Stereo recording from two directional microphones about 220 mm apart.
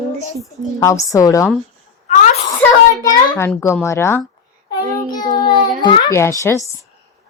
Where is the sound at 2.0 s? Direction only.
30° left (ahead or behind).